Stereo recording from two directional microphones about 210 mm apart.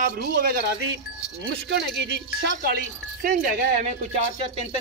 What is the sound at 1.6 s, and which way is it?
Speech, 55° right (ahead or behind).